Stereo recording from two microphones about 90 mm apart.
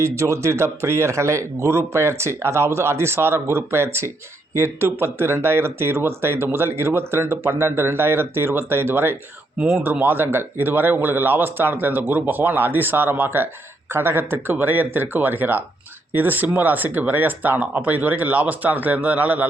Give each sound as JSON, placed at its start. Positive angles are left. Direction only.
{"t": 0.0, "sound": "speech", "side_deg": -35}